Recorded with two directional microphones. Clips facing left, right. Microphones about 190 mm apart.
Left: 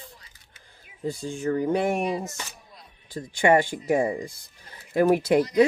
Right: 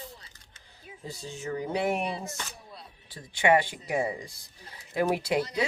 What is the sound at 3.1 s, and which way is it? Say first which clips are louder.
Speech: left 4 dB; 45° left (ahead or behind).